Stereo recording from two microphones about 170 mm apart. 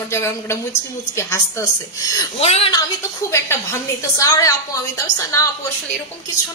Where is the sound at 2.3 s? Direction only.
35° left (ahead or behind).